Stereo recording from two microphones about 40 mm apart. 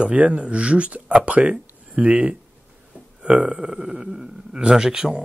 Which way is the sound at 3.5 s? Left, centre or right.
Centre.